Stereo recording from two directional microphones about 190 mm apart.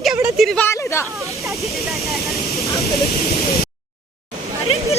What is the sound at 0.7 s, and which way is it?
Speech, 15° left (ahead or behind).